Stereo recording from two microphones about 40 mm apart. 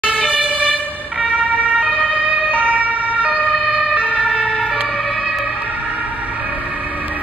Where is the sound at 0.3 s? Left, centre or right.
Right.